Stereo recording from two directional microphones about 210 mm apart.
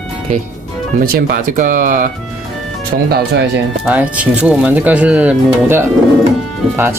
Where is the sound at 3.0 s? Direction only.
55° right (ahead or behind).